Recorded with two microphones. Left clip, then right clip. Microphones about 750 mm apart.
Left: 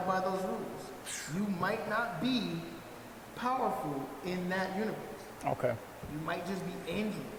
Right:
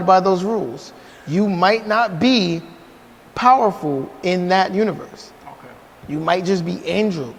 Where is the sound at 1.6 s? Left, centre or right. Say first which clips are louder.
Right 17 dB; right.